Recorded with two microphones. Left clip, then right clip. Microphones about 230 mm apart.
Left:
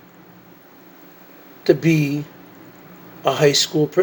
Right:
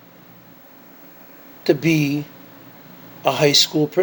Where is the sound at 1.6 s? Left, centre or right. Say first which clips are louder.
Left 1 dB; centre.